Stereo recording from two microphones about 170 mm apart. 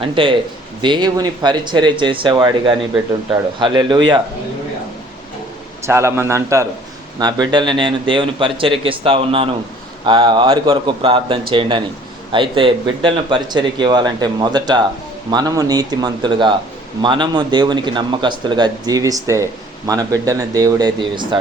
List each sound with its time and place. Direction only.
0.0 s speech: 30° right (ahead or behind)
5.8 s a man's voice: 15° right (ahead or behind)